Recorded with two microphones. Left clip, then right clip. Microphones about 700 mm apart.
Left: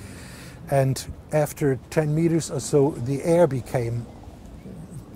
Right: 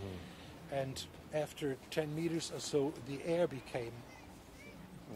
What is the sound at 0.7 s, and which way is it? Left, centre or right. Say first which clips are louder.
Speech: left 16 dB; left.